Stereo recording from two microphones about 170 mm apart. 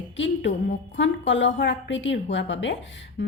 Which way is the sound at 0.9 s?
90° left.